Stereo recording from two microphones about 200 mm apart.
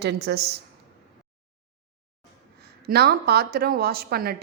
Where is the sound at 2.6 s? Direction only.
50° right (ahead or behind).